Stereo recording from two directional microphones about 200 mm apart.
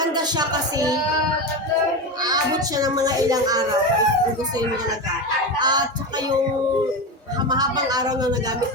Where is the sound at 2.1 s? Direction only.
20° right (ahead or behind).